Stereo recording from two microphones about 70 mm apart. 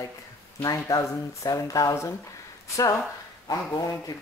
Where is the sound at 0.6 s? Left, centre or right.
Left.